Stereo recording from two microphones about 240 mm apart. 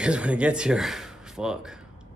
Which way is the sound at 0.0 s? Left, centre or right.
Centre.